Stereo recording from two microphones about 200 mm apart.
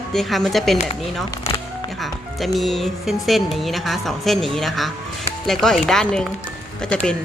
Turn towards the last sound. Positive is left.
turn(degrees=5)  # may be behind; listen again after turning